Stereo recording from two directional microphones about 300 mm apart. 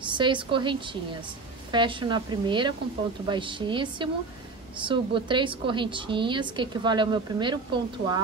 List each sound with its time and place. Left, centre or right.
0.1 s a woman's voice: centre